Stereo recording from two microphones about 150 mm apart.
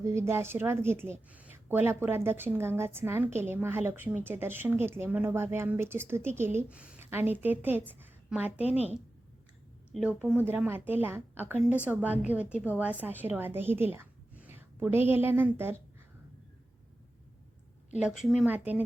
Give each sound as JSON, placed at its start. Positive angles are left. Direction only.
{"t": 0.0, "sound": "a woman's voice", "side_deg": -20}
{"t": 8.5, "sound": "a woman's voice", "side_deg": 45}
{"t": 9.9, "sound": "a woman's voice", "side_deg": -10}
{"t": 18.0, "sound": "a woman's voice", "side_deg": 0}